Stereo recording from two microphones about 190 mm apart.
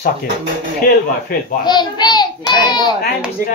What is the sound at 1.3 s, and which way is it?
Speech, 50° left (ahead or behind).